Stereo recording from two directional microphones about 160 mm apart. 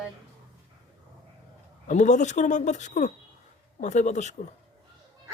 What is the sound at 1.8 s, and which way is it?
Speech, 50° left (ahead or behind).